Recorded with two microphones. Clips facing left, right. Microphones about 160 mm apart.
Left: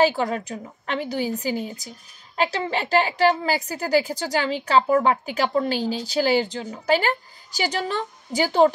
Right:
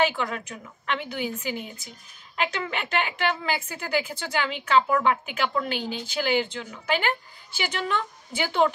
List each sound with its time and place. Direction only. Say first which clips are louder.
0.0 s a woman's voice: left 5 dB; 35° left (ahead or behind)